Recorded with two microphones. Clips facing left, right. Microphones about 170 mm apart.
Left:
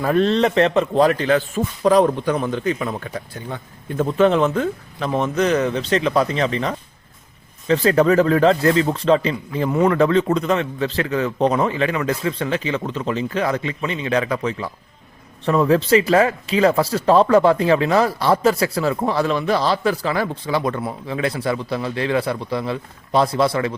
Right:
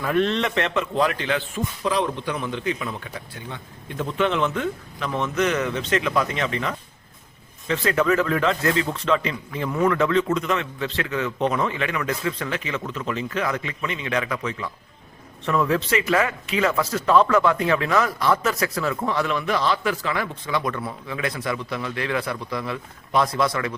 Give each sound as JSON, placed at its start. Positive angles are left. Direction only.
{"t": 0.0, "sound": "speech", "side_deg": 35}